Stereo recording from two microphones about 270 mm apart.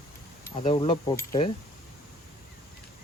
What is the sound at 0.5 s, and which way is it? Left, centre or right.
Speech, left.